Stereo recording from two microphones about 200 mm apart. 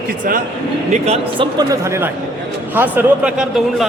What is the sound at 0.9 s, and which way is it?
A man's voice, 30° right (ahead or behind).